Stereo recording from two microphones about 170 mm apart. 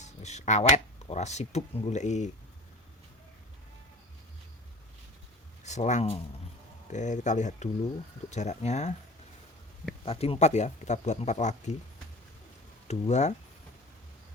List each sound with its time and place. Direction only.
0.0 s a sound: 40° left (ahead or behind)
1.1 s speech: 40° left (ahead or behind)
5.6 s speech: 45° left (ahead or behind)
10.1 s speech: 35° left (ahead or behind)
12.9 s speech: 40° left (ahead or behind)